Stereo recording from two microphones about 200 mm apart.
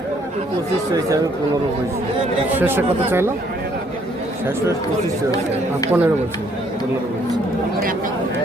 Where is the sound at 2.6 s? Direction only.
10° right (ahead or behind).